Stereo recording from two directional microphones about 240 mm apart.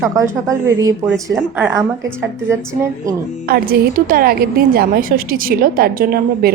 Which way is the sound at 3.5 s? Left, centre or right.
Right.